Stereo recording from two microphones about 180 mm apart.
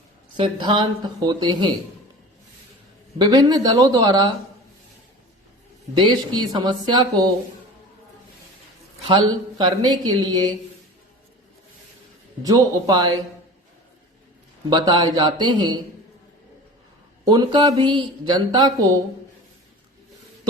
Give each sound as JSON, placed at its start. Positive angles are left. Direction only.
{"t": 0.3, "sound": "speech", "side_deg": -25}
{"t": 3.2, "sound": "speech", "side_deg": -20}
{"t": 5.9, "sound": "speech", "side_deg": -25}
{"t": 9.0, "sound": "speech", "side_deg": -25}
{"t": 12.5, "sound": "speech", "side_deg": -20}
{"t": 14.7, "sound": "speech", "side_deg": -25}
{"t": 17.2, "sound": "speech", "side_deg": -25}